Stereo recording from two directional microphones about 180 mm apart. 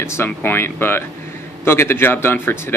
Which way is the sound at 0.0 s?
15° left (ahead or behind).